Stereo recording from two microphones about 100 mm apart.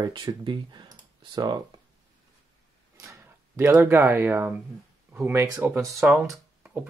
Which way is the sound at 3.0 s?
30° right (ahead or behind).